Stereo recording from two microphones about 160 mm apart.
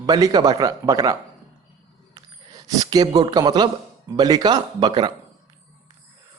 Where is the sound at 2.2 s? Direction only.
25° right (ahead or behind).